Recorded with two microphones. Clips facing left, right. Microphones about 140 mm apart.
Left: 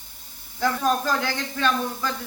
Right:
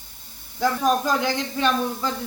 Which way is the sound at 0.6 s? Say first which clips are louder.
Right 2 dB; 15° right (ahead or behind).